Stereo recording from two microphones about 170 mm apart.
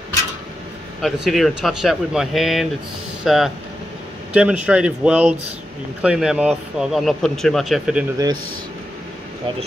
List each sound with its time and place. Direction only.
1.0 s speech: centre (ahead or behind)